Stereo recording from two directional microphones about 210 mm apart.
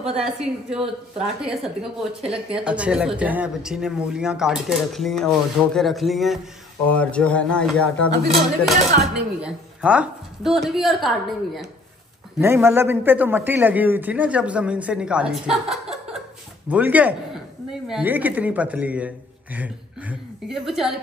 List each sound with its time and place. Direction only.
0.2 s speech: 5° right (ahead or behind)
8.9 s speech: 45° right (ahead or behind)
9.4 s speech: 5° right (ahead or behind)
12.4 s a man's voice: 10° right (ahead or behind)